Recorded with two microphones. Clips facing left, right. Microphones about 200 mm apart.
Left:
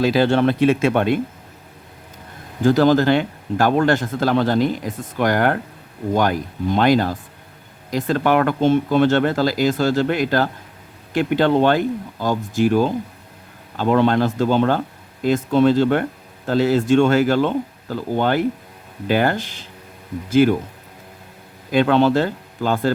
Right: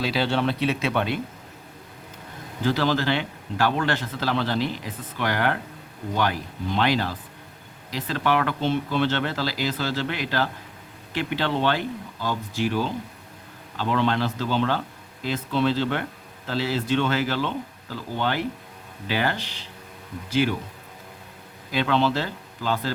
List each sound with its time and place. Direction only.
0.0 s speech: 50° left (ahead or behind)
2.6 s speech: 45° left (ahead or behind)
21.7 s speech: 50° left (ahead or behind)